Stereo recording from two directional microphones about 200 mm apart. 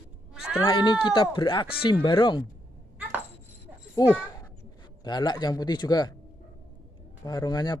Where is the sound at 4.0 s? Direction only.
20° left (ahead or behind).